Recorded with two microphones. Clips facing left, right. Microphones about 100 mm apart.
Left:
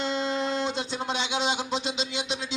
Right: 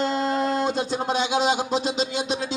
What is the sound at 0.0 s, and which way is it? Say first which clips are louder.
Speech: right 5 dB; 45° right (ahead or behind).